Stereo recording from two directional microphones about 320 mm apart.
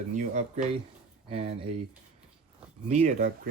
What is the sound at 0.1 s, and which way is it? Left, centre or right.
Speech, right.